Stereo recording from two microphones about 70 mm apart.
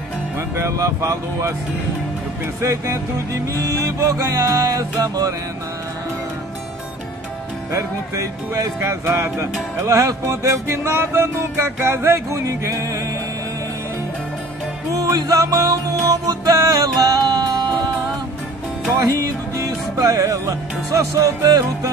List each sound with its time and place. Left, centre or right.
0.6 s music: right
2.6 s music: right
7.7 s music: right
9.0 s music: right
10.2 s music: right
15.1 s music: right
19.0 s music: right